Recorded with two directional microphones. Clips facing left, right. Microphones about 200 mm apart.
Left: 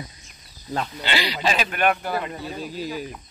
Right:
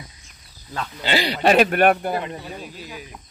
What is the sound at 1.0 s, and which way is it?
A man's voice, 45° right (ahead or behind).